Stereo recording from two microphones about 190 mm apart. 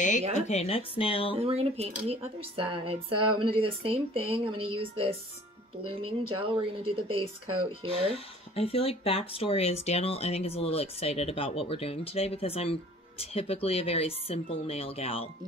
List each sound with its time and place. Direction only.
0.5 s speech: 30° left (ahead or behind)
1.3 s speech: 30° right (ahead or behind)
8.1 s speech: 30° left (ahead or behind)